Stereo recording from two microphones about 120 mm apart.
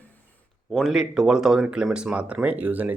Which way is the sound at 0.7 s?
Centre (ahead or behind).